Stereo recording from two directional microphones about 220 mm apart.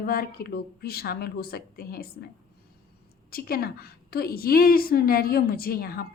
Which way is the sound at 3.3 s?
45° left (ahead or behind).